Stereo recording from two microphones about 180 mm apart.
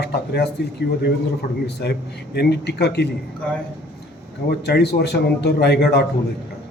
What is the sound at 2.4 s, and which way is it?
Speech, 65° left (ahead or behind).